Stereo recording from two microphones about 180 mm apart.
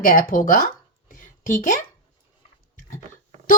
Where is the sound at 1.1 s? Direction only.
50° left (ahead or behind).